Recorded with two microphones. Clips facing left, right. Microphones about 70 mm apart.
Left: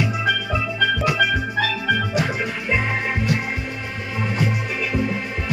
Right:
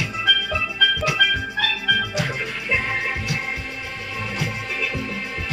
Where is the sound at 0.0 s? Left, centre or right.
Centre.